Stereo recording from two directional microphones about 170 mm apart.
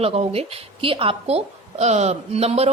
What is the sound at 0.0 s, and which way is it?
A woman's voice, 35° right (ahead or behind).